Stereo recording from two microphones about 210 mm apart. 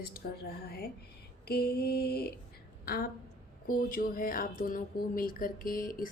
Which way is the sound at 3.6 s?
40° left (ahead or behind).